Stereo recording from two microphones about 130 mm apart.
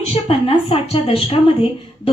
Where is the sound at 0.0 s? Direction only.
50° left (ahead or behind).